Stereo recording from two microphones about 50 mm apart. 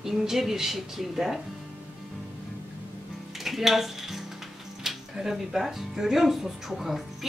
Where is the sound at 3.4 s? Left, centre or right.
Centre.